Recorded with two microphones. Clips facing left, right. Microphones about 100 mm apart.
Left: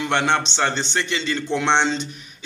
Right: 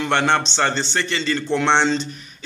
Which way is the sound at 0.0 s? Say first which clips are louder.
Right 2 dB; 5° left (ahead or behind).